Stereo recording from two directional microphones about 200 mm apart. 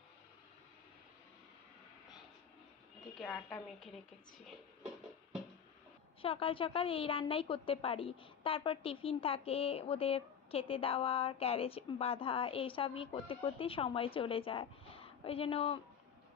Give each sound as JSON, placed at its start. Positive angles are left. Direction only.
{"t": 3.2, "sound": "a woman's voice", "side_deg": 5}
{"t": 6.2, "sound": "a woman's voice", "side_deg": 25}